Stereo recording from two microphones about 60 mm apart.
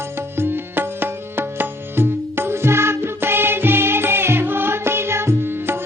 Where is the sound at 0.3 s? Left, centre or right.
Right.